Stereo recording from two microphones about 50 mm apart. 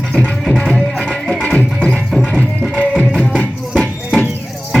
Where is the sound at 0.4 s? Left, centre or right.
Centre.